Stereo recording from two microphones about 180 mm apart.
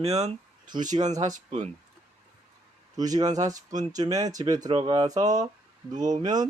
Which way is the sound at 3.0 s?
20° right (ahead or behind).